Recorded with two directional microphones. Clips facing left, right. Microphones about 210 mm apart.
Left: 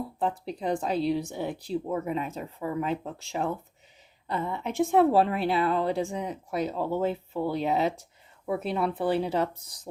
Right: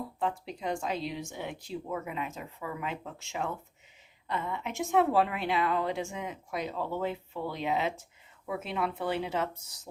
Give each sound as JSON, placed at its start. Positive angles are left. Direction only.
{"t": 0.2, "sound": "a woman's voice", "side_deg": 35}